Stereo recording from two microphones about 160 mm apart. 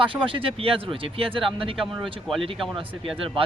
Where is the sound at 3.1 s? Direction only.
35° right (ahead or behind).